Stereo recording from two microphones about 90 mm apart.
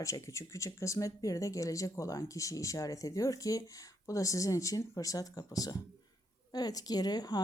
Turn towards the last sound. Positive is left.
turn(degrees=45)  # may be behind; listen again after turning